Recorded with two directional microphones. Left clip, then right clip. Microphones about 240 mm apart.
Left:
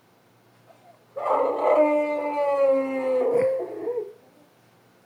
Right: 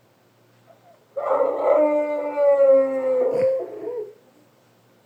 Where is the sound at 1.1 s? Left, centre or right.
Left.